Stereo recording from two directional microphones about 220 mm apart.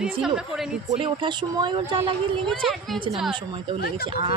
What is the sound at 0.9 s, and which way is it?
Speech, 20° right (ahead or behind).